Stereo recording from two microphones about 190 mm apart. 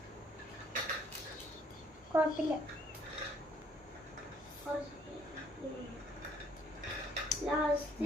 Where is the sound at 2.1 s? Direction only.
10° right (ahead or behind).